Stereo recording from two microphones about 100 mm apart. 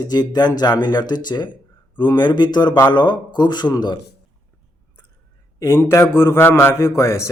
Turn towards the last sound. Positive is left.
turn(degrees=30)  # may be behind; listen again after turning